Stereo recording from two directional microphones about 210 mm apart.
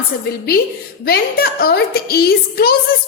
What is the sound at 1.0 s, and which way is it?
A woman's voice, 45° left (ahead or behind).